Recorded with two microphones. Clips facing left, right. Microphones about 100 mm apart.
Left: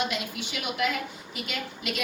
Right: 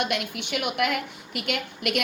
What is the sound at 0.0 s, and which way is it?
A woman's voice, 65° right (ahead or behind).